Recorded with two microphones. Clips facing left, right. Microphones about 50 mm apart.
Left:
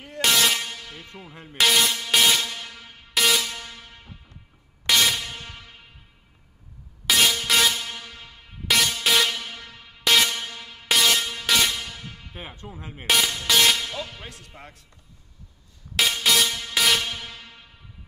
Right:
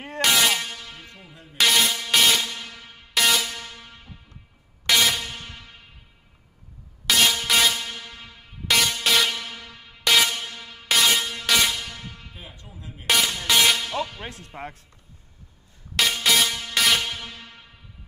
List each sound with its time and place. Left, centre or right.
0.2 s air horn: centre
1.3 s music: left
1.6 s music: centre
4.8 s air horn: centre
7.1 s music: centre
12.4 s speech: left
13.0 s speech: centre
13.3 s music: centre
14.2 s speech: right
16.1 s music: centre